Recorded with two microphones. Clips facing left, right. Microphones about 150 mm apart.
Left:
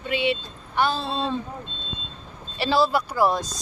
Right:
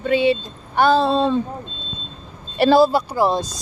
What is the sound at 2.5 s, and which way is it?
Speech, 50° right (ahead or behind).